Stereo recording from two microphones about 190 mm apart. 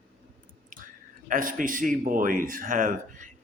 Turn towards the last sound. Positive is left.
turn(degrees=-45)  # may be behind; listen again after turning